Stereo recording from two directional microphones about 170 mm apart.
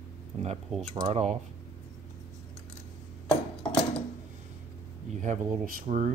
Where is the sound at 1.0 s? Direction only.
35° right (ahead or behind).